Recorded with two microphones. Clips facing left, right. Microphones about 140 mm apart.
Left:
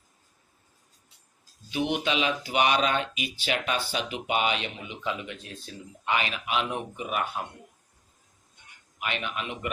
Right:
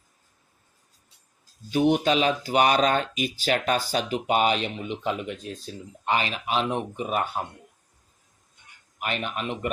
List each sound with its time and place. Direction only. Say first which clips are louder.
1.7 s speech: right 6 dB; 40° right (ahead or behind)
9.0 s speech: right 3 dB; 40° right (ahead or behind)